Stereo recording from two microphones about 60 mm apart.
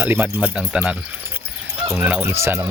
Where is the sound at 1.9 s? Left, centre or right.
Right.